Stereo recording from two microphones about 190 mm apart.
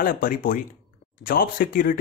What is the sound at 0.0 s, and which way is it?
Speech, 50° left (ahead or behind).